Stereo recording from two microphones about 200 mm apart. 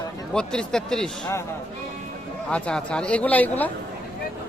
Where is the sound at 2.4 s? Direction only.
5° left (ahead or behind).